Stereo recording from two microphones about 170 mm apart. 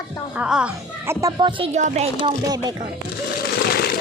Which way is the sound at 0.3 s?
5° right (ahead or behind).